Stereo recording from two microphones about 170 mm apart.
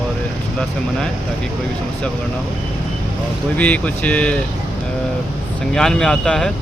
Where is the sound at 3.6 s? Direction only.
10° left (ahead or behind).